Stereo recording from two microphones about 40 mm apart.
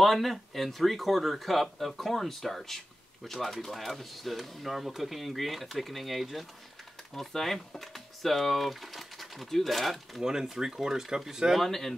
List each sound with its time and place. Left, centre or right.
0.0 s speech: centre
10.2 s speech: centre
11.6 s speech: centre